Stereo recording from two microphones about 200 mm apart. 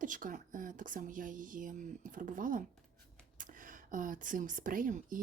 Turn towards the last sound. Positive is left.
turn(degrees=-45)  # may be behind; listen again after turning